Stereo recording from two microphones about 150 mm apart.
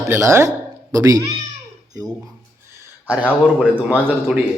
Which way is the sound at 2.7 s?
20° right (ahead or behind).